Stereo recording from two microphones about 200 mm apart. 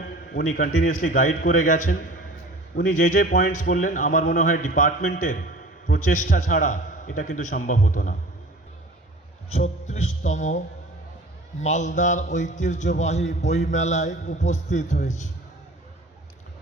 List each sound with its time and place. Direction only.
0.0 s a man's voice: 45° left (ahead or behind)
9.5 s a man's voice: 35° left (ahead or behind)
11.6 s a man's voice: 35° left (ahead or behind)